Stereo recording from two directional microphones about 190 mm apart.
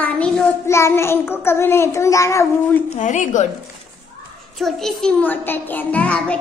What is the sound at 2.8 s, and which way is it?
Speech, 40° left (ahead or behind).